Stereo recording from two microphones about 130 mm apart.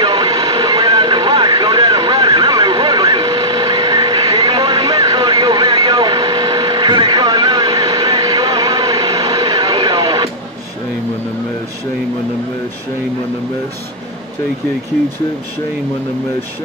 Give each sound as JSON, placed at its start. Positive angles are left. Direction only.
{"t": 0.0, "sound": "vehicle", "side_deg": -40}